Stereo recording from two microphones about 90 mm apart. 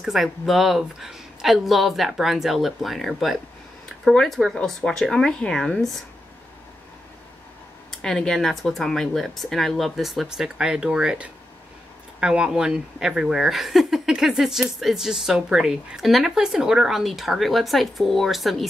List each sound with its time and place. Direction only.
0.0 s speech: centre (ahead or behind)
7.9 s speech: 5° left (ahead or behind)